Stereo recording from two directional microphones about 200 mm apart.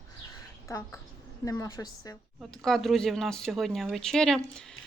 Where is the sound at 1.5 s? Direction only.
15° left (ahead or behind).